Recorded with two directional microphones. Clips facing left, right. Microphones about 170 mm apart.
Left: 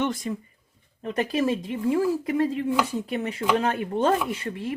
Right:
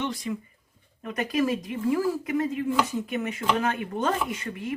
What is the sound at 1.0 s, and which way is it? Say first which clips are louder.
Speech: left 2 dB; 30° left (ahead or behind).